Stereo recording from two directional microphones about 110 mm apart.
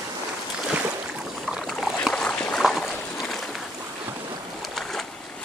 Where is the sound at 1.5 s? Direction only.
Centre (ahead or behind).